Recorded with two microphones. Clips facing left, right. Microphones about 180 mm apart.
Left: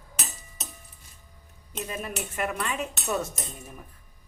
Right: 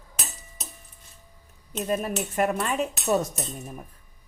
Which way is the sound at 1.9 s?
40° right (ahead or behind).